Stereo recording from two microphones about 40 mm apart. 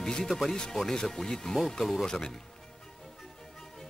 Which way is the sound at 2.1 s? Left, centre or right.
Centre.